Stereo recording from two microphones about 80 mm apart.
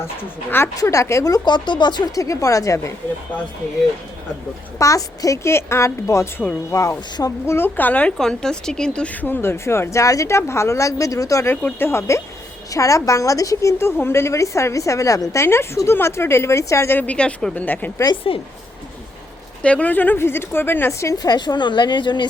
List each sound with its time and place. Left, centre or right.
0.8 s a woman's voice: left
1.5 s a woman's voice: left
2.1 s a woman's voice: left
4.8 s a woman's voice: left
8.2 s speech: centre
9.2 s a woman's voice: left
11.5 s a woman's voice: left
11.9 s a woman's voice: left
16.9 s a woman's voice: centre
18.3 s speech: left
19.6 s a woman's voice: centre
21.1 s a woman's voice: left